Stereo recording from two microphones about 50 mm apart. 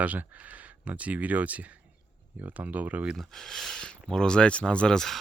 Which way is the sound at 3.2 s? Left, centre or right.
Centre.